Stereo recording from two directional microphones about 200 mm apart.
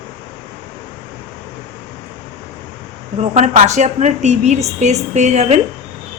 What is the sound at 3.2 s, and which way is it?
A woman's voice, 35° right (ahead or behind).